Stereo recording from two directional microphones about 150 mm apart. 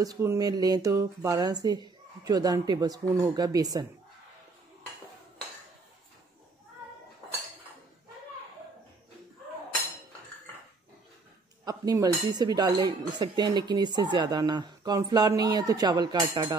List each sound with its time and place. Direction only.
0.0 s speech: 20° right (ahead or behind)
11.6 s speech: 25° right (ahead or behind)